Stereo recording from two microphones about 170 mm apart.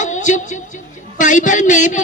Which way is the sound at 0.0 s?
45° left (ahead or behind).